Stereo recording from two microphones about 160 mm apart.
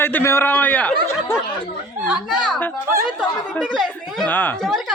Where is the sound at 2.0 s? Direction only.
Centre (ahead or behind).